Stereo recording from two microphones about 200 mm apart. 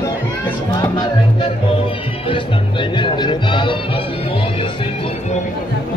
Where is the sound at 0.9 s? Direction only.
20° left (ahead or behind).